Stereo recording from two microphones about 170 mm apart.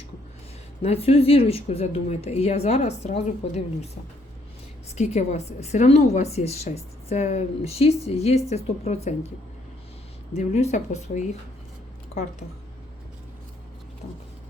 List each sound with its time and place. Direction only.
0.8 s speech: 35° left (ahead or behind)
4.9 s speech: 40° left (ahead or behind)
10.3 s speech: 40° left (ahead or behind)